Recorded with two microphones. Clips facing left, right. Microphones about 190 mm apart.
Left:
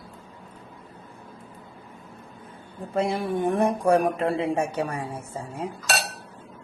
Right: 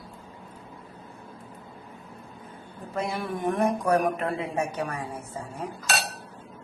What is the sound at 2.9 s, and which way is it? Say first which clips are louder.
Speech: left 5 dB; 30° left (ahead or behind).